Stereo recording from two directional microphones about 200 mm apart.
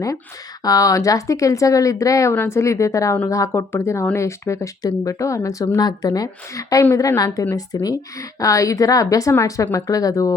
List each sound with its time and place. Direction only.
0.6 s speech: 15° left (ahead or behind)